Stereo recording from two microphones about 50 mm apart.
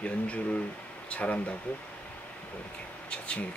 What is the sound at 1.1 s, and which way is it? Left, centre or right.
Speech, left.